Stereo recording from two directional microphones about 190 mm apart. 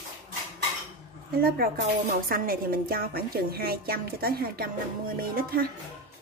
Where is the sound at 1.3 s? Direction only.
50° right (ahead or behind).